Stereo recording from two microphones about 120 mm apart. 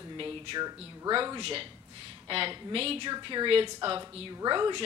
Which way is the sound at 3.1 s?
40° right (ahead or behind).